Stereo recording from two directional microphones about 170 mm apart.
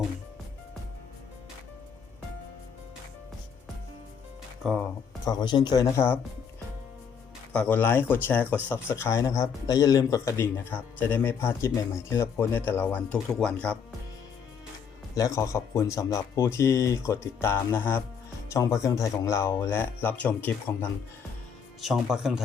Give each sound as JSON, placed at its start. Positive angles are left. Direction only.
{"t": 4.6, "sound": "speech", "side_deg": 0}
{"t": 5.2, "sound": "speech", "side_deg": 25}
{"t": 7.5, "sound": "speech", "side_deg": 10}
{"t": 15.1, "sound": "speech", "side_deg": 20}
{"t": 21.8, "sound": "speech", "side_deg": 0}